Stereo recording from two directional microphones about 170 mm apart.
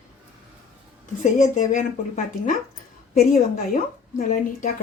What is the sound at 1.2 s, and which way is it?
Speech, 45° left (ahead or behind).